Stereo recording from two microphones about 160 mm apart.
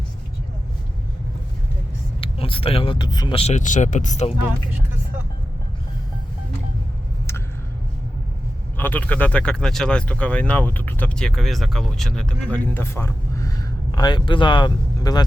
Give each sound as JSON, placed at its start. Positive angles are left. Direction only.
{"t": 2.2, "sound": "speech", "side_deg": 35}
{"t": 3.5, "sound": "speech", "side_deg": 50}
{"t": 4.4, "sound": "speech", "side_deg": -10}
{"t": 8.8, "sound": "speech", "side_deg": 10}